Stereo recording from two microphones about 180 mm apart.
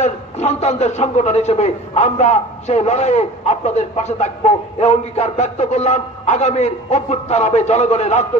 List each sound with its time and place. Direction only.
0.0 s a man's voice: 35° left (ahead or behind)